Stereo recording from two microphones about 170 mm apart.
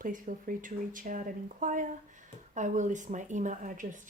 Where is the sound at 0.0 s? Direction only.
50° right (ahead or behind).